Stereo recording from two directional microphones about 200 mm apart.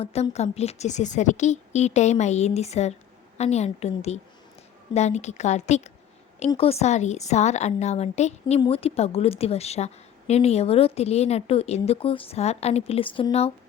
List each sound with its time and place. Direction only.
0.0 s a woman's voice: 30° left (ahead or behind)